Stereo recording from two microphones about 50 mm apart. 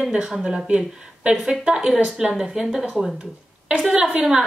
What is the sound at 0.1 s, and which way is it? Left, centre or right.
A woman's voice, centre.